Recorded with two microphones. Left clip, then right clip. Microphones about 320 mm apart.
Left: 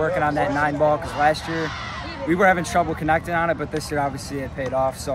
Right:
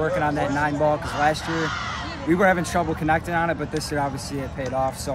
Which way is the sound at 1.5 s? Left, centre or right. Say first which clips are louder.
Right 1 dB; right.